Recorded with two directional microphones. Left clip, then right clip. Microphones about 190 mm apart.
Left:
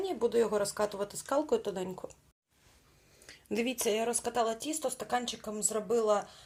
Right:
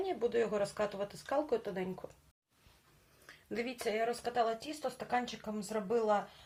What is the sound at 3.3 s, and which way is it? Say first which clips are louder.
Speech: left 6 dB; 50° left (ahead or behind).